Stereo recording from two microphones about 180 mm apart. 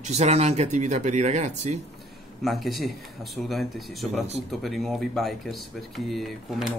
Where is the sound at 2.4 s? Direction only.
Centre (ahead or behind).